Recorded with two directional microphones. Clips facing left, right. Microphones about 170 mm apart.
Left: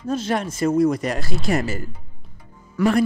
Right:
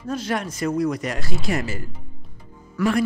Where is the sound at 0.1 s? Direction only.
25° left (ahead or behind).